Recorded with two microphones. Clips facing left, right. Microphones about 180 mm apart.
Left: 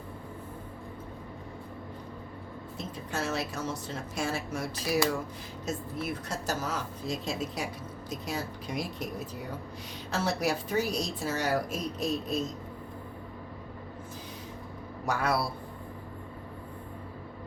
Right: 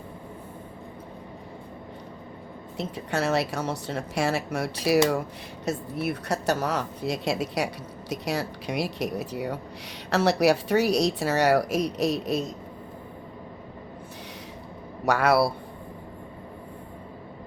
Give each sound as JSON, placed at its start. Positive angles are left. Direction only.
{"t": 2.7, "sound": "a woman's voice", "side_deg": -70}
{"t": 15.0, "sound": "a woman's voice", "side_deg": -75}